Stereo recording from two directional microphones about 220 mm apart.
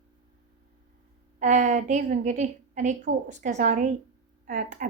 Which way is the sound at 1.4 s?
35° right (ahead or behind).